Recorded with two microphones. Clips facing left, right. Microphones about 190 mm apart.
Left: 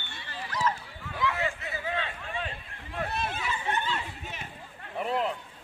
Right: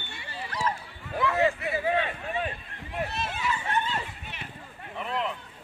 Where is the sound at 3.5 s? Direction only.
50° right (ahead or behind).